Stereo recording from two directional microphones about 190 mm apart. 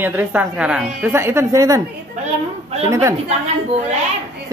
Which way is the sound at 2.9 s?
15° right (ahead or behind).